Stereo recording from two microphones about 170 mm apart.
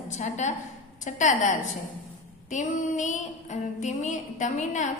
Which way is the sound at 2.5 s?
45° left (ahead or behind).